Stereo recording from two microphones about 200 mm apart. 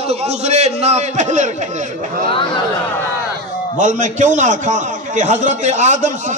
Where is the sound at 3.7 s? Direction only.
40° right (ahead or behind).